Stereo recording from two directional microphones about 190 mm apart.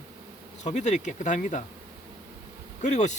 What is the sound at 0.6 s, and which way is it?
Speech, 40° left (ahead or behind).